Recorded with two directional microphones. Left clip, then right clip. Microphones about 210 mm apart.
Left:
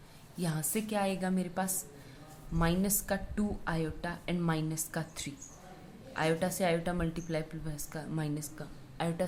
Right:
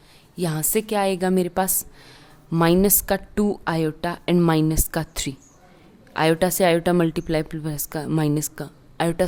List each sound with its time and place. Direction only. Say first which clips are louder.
0.3 s a woman's voice: right 13 dB; 50° right (ahead or behind)